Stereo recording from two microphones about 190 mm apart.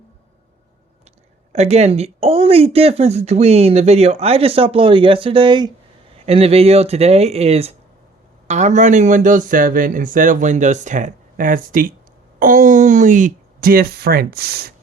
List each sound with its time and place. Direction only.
1.5 s speech: 35° right (ahead or behind); by 14.7 s 55° right (ahead or behind)